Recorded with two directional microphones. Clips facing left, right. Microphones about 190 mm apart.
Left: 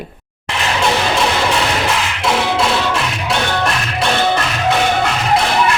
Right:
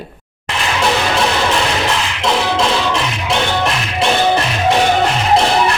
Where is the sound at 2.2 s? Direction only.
5° left (ahead or behind).